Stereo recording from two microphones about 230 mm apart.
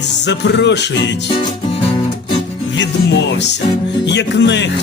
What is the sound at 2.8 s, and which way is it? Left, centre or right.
Music, left.